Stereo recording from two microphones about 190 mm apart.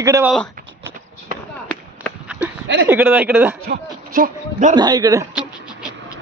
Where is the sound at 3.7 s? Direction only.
50° right (ahead or behind).